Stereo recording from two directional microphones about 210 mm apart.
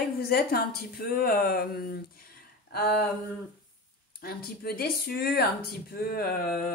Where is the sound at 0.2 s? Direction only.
45° left (ahead or behind).